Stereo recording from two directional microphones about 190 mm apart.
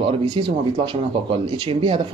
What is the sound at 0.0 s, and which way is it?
Speech, 30° right (ahead or behind).